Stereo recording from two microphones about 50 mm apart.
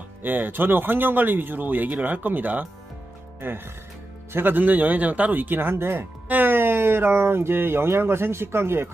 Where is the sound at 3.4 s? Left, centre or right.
Right.